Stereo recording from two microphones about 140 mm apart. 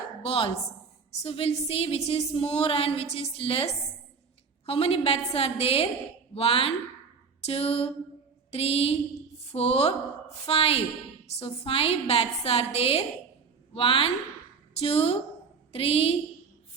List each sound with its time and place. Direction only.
0.3 s a woman's voice: 40° left (ahead or behind)